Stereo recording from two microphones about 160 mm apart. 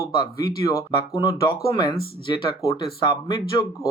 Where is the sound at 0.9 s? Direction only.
30° left (ahead or behind).